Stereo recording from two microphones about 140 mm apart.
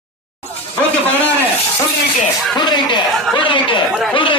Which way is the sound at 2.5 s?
35° left (ahead or behind).